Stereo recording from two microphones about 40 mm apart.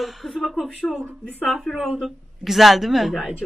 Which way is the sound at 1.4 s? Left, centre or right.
Centre.